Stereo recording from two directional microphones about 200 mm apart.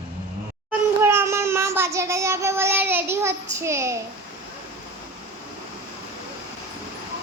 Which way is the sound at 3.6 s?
15° right (ahead or behind).